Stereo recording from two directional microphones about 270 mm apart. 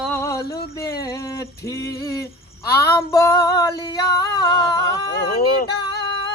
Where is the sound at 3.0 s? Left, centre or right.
Centre.